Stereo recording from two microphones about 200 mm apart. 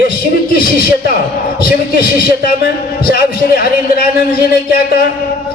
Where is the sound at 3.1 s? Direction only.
50° left (ahead or behind).